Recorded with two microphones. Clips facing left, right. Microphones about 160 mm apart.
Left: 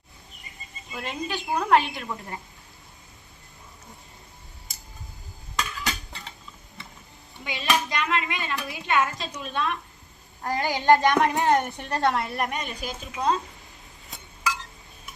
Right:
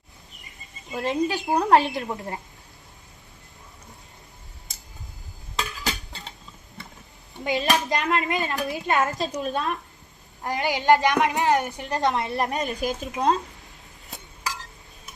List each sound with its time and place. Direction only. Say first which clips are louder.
0.9 s speech: right 8 dB; 40° right (ahead or behind)
5.8 s cutlery: right 1 dB; 30° right (ahead or behind)
7.4 s a woman's voice: right 3 dB; 45° right (ahead or behind)
10.4 s speech: right 1 dB; 20° right (ahead or behind)
10.8 s music: even; 15° right (ahead or behind)
11.4 s speech: even; 5° right (ahead or behind); by 13.3 s 45° right (ahead or behind)
14.1 s chink: left 3 dB; 40° right (ahead or behind)